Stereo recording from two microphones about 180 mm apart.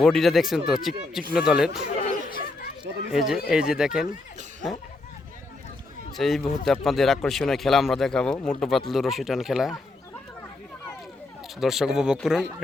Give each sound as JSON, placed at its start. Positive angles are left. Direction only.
{"t": 0.0, "sound": "speech", "side_deg": 0}
{"t": 2.0, "sound": "chatter", "side_deg": 55}
{"t": 3.1, "sound": "speech", "side_deg": 0}
{"t": 6.1, "sound": "speech", "side_deg": 0}
{"t": 11.6, "sound": "speech", "side_deg": 0}